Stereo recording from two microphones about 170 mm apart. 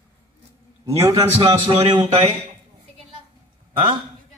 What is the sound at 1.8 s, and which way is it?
Speech, 40° right (ahead or behind).